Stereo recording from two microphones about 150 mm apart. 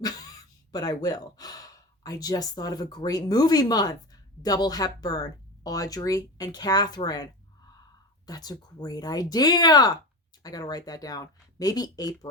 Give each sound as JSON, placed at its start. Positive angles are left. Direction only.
{"t": 0.0, "sound": "speech", "side_deg": 25}
{"t": 8.3, "sound": "speech", "side_deg": 25}